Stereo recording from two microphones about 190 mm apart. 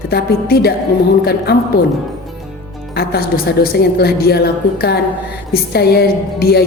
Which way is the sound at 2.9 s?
55° left (ahead or behind).